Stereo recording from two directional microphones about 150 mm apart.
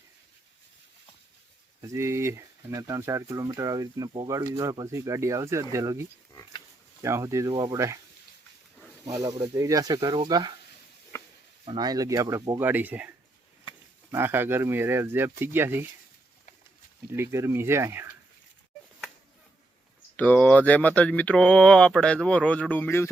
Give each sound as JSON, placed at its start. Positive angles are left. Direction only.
{"t": 1.8, "sound": "speech", "side_deg": -20}
{"t": 9.0, "sound": "speech", "side_deg": -25}
{"t": 11.1, "sound": "a sound", "side_deg": 15}
{"t": 11.6, "sound": "speech", "side_deg": -30}
{"t": 17.1, "sound": "speech", "side_deg": -15}
{"t": 20.1, "sound": "speech", "side_deg": 10}